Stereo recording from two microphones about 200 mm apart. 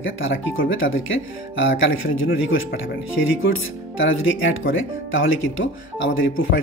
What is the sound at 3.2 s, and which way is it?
Speech, 65° left (ahead or behind).